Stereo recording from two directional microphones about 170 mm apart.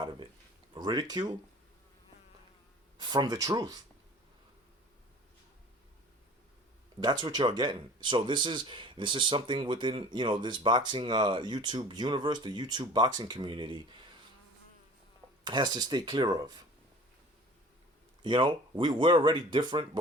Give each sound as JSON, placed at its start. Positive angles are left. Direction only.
{"t": 0.0, "sound": "a sound", "side_deg": -30}
{"t": 0.7, "sound": "speech", "side_deg": -25}
{"t": 3.0, "sound": "speech", "side_deg": -25}
{"t": 7.0, "sound": "speech", "side_deg": -25}
{"t": 15.4, "sound": "speech", "side_deg": -25}
{"t": 18.2, "sound": "speech", "side_deg": -25}